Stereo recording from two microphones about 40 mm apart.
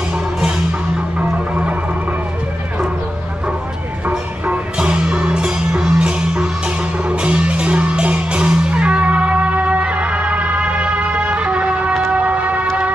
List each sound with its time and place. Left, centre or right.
1.5 s music: right
4.5 s music: right
12.1 s train: right